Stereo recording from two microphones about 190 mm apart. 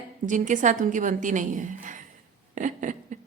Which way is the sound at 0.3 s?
40° right (ahead or behind).